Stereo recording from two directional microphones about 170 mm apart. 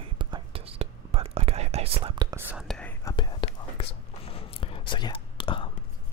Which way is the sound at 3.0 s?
25° left (ahead or behind).